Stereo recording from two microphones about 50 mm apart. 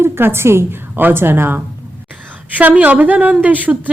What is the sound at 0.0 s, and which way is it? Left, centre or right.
Speech, right.